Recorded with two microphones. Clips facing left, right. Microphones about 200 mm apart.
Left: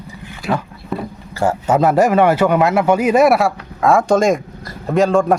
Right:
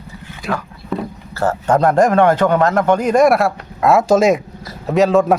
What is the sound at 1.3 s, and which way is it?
A man's voice, 10° left (ahead or behind).